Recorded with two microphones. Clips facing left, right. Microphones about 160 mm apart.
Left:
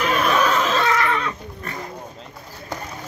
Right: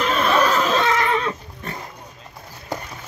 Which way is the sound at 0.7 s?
25° right (ahead or behind).